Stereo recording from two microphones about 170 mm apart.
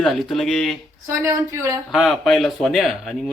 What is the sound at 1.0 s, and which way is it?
Speech, 15° right (ahead or behind).